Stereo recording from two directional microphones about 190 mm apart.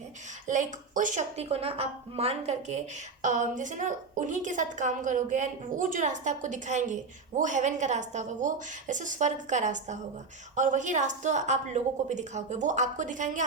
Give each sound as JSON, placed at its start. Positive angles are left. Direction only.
{"t": 0.4, "sound": "a woman's voice", "side_deg": -40}